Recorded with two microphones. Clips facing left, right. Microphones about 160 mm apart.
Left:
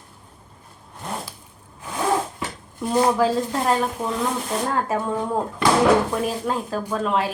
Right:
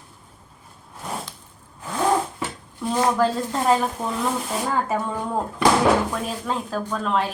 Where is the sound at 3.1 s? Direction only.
Centre (ahead or behind).